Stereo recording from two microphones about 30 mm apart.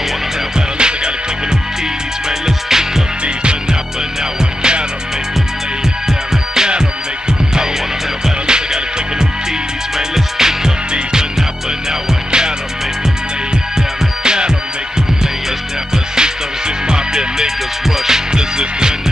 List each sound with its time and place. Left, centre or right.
0.6 s music: right
4.2 s music: right
6.0 s music: centre
8.5 s music: right
9.9 s music: centre
11.9 s music: right
14.2 s music: right
16.2 s music: right
17.8 s music: centre
18.3 s music: right